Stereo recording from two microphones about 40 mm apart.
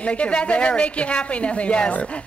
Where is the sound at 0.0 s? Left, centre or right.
Left.